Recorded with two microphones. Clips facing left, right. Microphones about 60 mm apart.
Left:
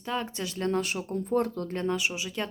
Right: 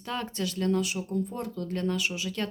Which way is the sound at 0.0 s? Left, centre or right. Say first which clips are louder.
Left 1 dB; centre.